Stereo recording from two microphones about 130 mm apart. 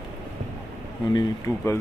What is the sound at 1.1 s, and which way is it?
Speech, 20° left (ahead or behind).